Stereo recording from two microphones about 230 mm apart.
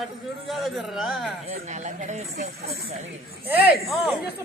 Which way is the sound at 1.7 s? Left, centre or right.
Right.